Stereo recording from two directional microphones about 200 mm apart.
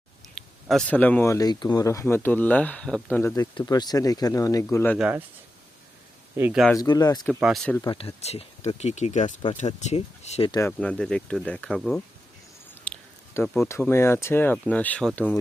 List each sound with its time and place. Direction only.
0.3 s speech: centre (ahead or behind)
4.9 s speech: 5° right (ahead or behind)
6.3 s speech: 10° right (ahead or behind)
6.7 s speech: 20° left (ahead or behind)
7.4 s speech: centre (ahead or behind)
7.8 s speech: 25° left (ahead or behind)
10.5 s speech: 10° left (ahead or behind)